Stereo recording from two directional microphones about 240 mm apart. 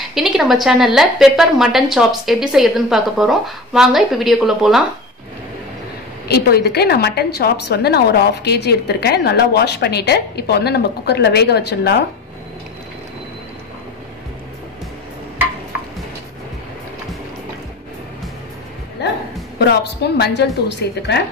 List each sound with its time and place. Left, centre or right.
0.1 s a woman's voice: centre
6.2 s a woman's voice: left
19.0 s music: left
20.2 s a woman's voice: left